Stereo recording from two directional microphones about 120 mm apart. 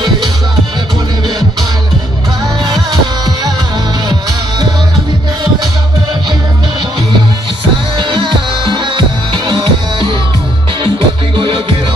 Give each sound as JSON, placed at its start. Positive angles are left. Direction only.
{"t": 2.6, "sound": "music", "side_deg": -35}
{"t": 8.0, "sound": "music", "side_deg": -40}
{"t": 11.3, "sound": "music", "side_deg": -45}